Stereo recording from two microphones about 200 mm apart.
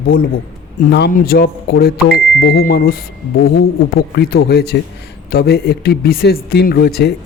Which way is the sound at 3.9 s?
50° left (ahead or behind).